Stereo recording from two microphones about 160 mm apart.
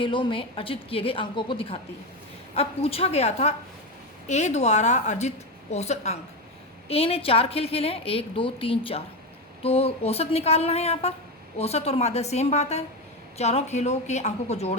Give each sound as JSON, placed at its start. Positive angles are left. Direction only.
{"t": 0.0, "sound": "a woman's voice", "side_deg": 30}